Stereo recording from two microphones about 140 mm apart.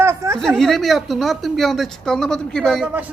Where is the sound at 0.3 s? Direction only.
Centre (ahead or behind).